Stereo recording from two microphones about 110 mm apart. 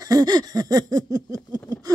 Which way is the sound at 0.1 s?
35° right (ahead or behind).